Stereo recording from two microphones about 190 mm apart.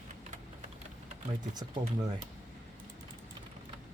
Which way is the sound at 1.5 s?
20° right (ahead or behind).